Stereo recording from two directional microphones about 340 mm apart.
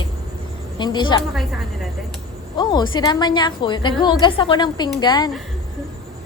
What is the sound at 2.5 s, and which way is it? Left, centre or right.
A woman's voice, centre.